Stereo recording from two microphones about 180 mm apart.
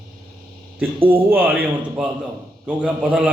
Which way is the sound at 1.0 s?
10° right (ahead or behind).